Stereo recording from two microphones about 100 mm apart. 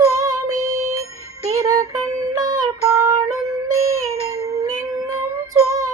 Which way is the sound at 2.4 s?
40° right (ahead or behind).